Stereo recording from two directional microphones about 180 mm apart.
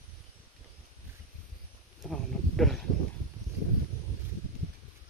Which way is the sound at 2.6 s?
Centre (ahead or behind).